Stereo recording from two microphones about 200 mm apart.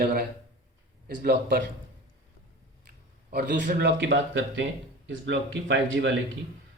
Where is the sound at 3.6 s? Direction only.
50° right (ahead or behind).